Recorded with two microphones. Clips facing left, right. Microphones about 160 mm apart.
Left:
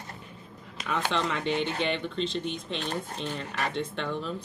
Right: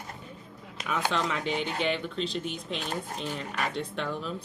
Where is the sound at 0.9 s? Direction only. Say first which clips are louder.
Even; 10° right (ahead or behind).